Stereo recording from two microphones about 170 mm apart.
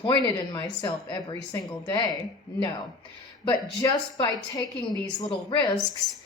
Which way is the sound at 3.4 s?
25° left (ahead or behind).